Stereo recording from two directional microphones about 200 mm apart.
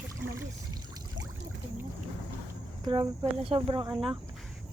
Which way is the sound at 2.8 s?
25° right (ahead or behind).